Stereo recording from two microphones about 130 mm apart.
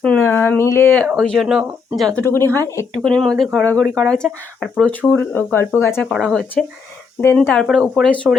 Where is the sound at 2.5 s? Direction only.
20° left (ahead or behind).